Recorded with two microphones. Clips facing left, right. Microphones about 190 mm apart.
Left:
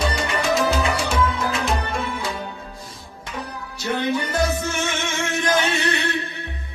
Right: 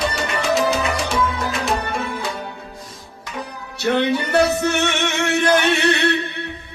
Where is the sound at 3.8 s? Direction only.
70° right (ahead or behind).